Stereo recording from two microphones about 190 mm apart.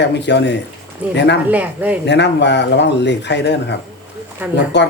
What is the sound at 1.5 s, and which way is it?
Speech, 10° right (ahead or behind).